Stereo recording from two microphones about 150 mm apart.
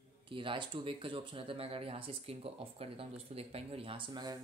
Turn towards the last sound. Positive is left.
turn(degrees=-30)  # may be behind; listen again after turning